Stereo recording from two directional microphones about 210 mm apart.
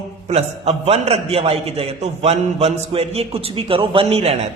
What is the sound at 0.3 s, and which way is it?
A man's voice, 30° right (ahead or behind).